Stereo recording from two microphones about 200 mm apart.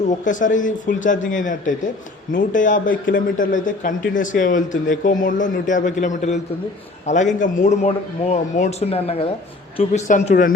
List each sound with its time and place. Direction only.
0.3 s a man's voice: 40° left (ahead or behind)